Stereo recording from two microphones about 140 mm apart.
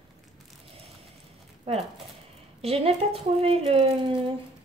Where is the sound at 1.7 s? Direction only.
45° right (ahead or behind).